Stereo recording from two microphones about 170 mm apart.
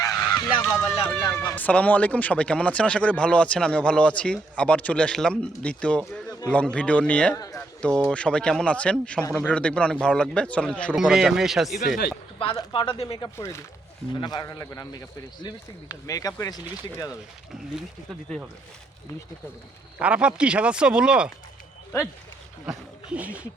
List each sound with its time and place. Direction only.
0.0 s honk: 20° left (ahead or behind)
0.9 s speech: 30° left (ahead or behind)
1.5 s speech: 10° left (ahead or behind)
7.3 s a sound: 20° left (ahead or behind)
7.8 s speech: 5° left (ahead or behind)
10.9 s speech: 5° right (ahead or behind)
12.5 s speech: 25° left (ahead or behind)
13.2 s speech: 15° left (ahead or behind)
20.0 s speech: 5° right (ahead or behind)
22.6 s speech: 5° right (ahead or behind)